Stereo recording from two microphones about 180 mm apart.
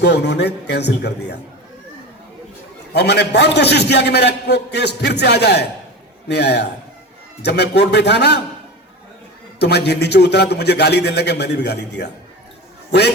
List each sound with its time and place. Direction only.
0.0 s a man's voice: 70° left (ahead or behind)
2.9 s a man's voice: 65° left (ahead or behind)
9.6 s a man's voice: 65° left (ahead or behind)